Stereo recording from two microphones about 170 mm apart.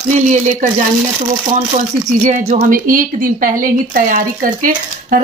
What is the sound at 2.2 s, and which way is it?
Speech, 55° right (ahead or behind).